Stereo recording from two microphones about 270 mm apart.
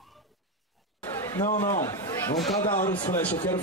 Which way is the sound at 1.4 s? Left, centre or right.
Left.